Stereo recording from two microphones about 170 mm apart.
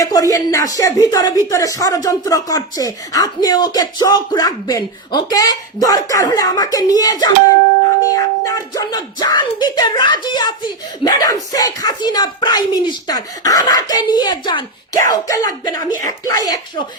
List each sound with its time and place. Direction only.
0.0 s speech: 20° left (ahead or behind)